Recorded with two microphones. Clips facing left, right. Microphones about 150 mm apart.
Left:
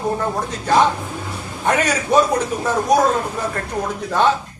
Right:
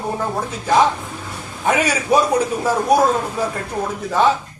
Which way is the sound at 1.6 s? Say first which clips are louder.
Even; 5° right (ahead or behind).